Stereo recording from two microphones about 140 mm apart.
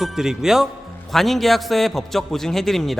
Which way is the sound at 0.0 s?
5° right (ahead or behind).